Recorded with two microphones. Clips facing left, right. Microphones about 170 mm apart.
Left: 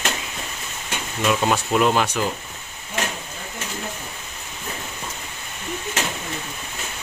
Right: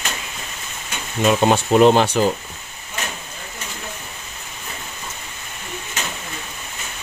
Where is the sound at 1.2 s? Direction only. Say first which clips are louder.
Right 5 dB; 30° right (ahead or behind).